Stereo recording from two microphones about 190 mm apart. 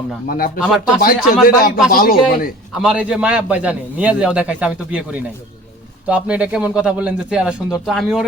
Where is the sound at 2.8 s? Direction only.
5° right (ahead or behind).